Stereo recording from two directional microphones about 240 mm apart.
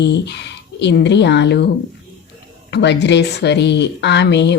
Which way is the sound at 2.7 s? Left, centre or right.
Left.